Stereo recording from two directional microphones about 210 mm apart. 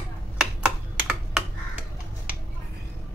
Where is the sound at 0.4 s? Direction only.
Centre (ahead or behind).